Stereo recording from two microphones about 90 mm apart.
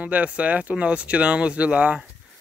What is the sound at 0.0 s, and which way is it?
Speech, 15° right (ahead or behind).